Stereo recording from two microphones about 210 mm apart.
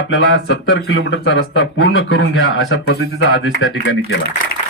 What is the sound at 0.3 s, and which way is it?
A man's voice, 65° left (ahead or behind).